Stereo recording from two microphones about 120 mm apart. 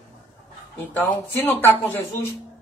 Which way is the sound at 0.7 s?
15° left (ahead or behind).